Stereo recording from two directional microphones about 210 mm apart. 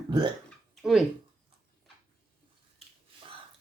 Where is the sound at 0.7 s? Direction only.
Centre (ahead or behind).